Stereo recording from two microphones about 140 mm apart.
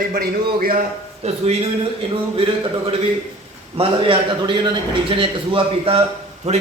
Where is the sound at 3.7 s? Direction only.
40° right (ahead or behind).